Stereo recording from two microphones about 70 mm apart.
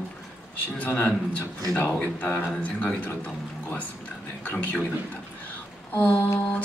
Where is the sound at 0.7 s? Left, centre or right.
Left.